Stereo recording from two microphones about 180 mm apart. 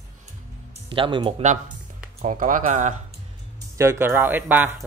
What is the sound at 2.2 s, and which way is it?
Speech, 45° right (ahead or behind).